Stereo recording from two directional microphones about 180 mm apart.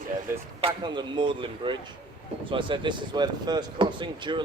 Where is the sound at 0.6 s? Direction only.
25° right (ahead or behind).